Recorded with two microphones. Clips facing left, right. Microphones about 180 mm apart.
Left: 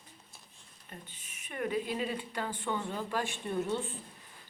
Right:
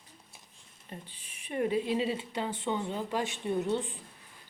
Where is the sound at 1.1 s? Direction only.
35° right (ahead or behind); by 4.0 s 15° right (ahead or behind).